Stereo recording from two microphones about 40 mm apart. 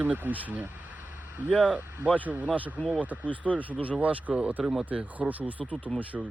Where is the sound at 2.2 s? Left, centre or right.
Right.